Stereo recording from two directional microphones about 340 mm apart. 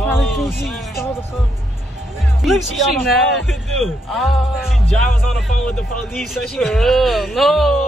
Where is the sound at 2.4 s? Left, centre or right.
Centre.